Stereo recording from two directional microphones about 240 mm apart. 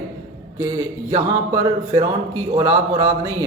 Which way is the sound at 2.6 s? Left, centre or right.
Centre.